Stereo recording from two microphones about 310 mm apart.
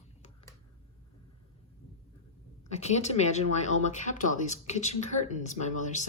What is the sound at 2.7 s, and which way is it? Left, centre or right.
Speech, left.